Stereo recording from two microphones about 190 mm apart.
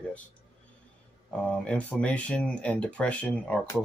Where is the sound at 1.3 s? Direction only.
5° left (ahead or behind).